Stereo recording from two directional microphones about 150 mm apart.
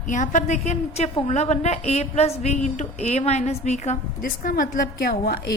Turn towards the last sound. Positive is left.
turn(degrees=85)